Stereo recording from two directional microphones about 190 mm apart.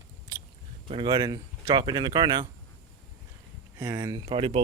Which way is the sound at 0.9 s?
25° right (ahead or behind).